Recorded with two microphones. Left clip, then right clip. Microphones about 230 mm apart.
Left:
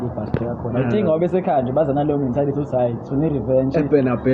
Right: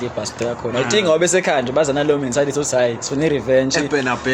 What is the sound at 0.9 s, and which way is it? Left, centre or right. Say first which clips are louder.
A man's voice: right 4 dB; right.